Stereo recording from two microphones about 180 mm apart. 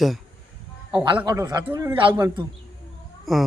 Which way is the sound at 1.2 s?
20° right (ahead or behind).